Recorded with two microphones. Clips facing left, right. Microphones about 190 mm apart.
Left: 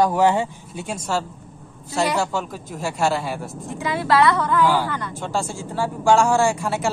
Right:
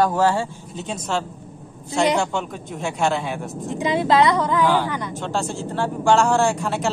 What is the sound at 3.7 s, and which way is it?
A woman's voice, 20° right (ahead or behind).